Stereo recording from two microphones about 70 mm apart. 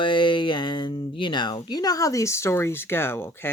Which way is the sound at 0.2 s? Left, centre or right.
Left.